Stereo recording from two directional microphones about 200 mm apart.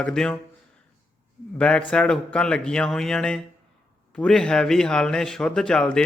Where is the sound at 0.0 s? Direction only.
5° left (ahead or behind).